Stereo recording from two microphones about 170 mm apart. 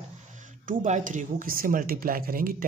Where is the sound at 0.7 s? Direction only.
45° right (ahead or behind).